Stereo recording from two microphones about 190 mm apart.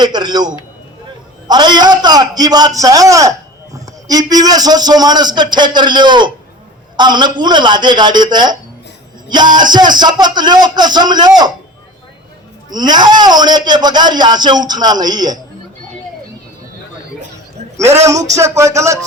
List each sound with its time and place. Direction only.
0.0 s a man's voice: 20° right (ahead or behind)
12.7 s a man's voice: 20° right (ahead or behind)
18.0 s a sound: 15° right (ahead or behind)